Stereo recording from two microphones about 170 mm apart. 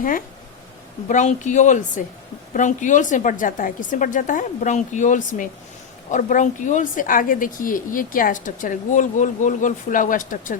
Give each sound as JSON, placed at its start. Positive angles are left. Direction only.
{"t": 1.0, "sound": "a woman's voice", "side_deg": 45}